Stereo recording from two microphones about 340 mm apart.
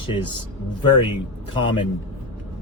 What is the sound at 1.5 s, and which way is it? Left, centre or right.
Speech, centre.